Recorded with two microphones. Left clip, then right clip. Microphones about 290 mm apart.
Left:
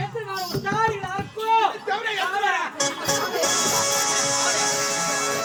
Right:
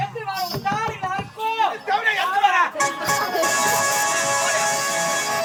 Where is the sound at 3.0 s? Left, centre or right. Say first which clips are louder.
Right 1 dB; centre.